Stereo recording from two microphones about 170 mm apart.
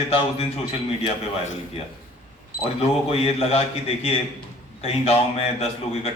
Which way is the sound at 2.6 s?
35° left (ahead or behind).